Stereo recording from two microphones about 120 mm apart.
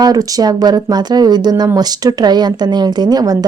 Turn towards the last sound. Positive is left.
turn(degrees=-35)  # may be behind; listen again after turning